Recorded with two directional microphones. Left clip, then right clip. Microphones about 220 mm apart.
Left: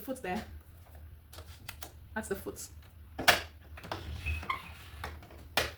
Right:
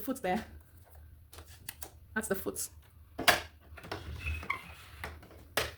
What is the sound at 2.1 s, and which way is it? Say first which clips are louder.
Speech: right 3 dB; 55° right (ahead or behind).